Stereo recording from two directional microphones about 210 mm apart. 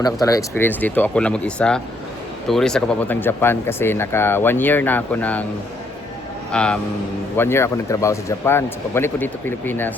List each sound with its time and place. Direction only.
0.0 s speech: 15° left (ahead or behind)
6.5 s speech: 5° left (ahead or behind)